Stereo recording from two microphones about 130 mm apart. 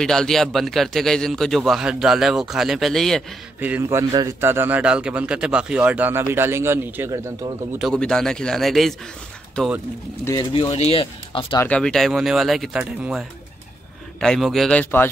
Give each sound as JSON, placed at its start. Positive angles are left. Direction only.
{"t": 0.0, "sound": "a man's voice", "side_deg": 5}
{"t": 3.6, "sound": "a man's voice", "side_deg": -15}
{"t": 4.1, "sound": "a man's voice", "side_deg": -30}
{"t": 4.4, "sound": "a man's voice", "side_deg": -15}
{"t": 7.9, "sound": "a man's voice", "side_deg": 5}
{"t": 10.3, "sound": "speech", "side_deg": 40}
{"t": 11.6, "sound": "a man's voice", "side_deg": 5}
{"t": 14.2, "sound": "a man's voice", "side_deg": 5}